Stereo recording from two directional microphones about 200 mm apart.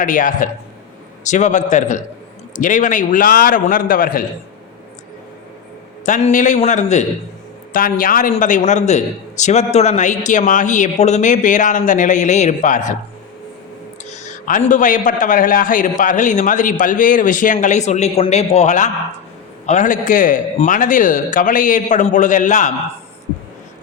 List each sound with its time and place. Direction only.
0.0 s a man's voice: 40° left (ahead or behind)
6.1 s a man's voice: 35° left (ahead or behind)
14.0 s a man's voice: 35° left (ahead or behind)